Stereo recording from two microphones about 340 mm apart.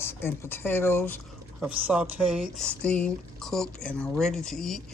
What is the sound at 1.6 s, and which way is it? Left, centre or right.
Speech, centre.